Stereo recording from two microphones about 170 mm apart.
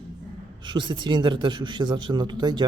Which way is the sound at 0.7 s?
25° right (ahead or behind).